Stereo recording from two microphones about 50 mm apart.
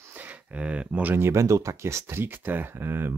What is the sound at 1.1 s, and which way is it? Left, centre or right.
Speech, right.